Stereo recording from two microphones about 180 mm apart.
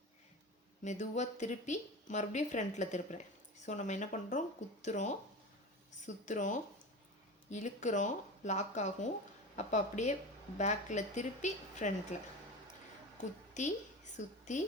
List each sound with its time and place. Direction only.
0.9 s speech: 40° left (ahead or behind)
13.5 s a woman's voice: 40° left (ahead or behind)